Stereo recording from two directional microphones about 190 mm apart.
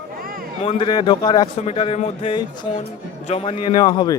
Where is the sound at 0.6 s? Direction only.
30° left (ahead or behind).